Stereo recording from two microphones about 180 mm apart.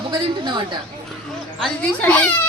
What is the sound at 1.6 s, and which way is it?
Speech, 5° left (ahead or behind).